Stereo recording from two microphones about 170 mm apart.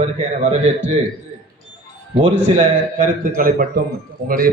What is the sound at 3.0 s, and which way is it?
A man's voice, 50° right (ahead or behind).